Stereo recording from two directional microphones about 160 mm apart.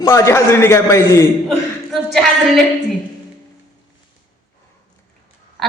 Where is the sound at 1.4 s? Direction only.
Centre (ahead or behind).